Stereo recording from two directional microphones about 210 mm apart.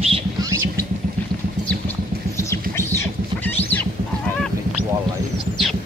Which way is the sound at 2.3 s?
10° left (ahead or behind).